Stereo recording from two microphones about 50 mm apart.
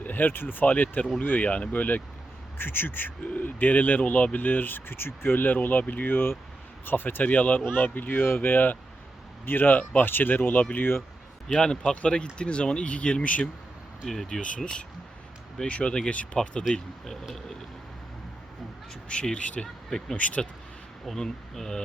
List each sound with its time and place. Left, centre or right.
0.0 s speech: left
11.4 s speech: centre
14.0 s speech: centre
17.1 s speech: centre
19.0 s speech: centre
21.2 s speech: centre